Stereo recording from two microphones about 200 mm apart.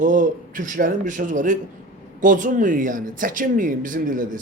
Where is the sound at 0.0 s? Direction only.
40° right (ahead or behind).